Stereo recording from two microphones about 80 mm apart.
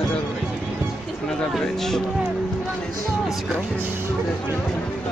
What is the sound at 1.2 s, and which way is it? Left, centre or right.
Speech, centre.